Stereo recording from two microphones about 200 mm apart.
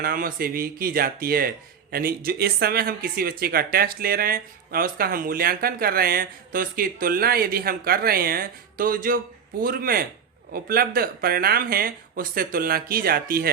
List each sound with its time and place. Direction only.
0.0 s speech: 45° right (ahead or behind)